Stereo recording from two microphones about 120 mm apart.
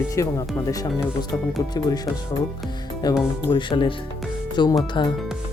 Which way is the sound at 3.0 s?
35° left (ahead or behind).